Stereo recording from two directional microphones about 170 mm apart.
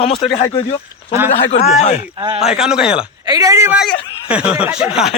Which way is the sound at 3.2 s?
20° right (ahead or behind).